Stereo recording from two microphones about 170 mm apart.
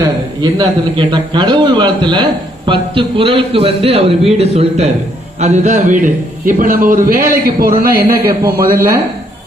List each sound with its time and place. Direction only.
0.6 s a man's voice: 25° right (ahead or behind); by 8.8 s 60° right (ahead or behind)